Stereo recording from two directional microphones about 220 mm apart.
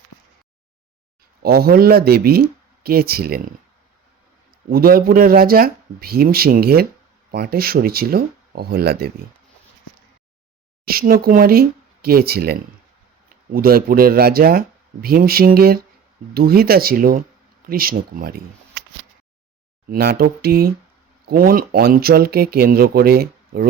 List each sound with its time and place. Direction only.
1.4 s speech: 45° right (ahead or behind)
4.7 s speech: 40° right (ahead or behind)
10.8 s speech: 40° right (ahead or behind)
19.9 s speech: 45° right (ahead or behind)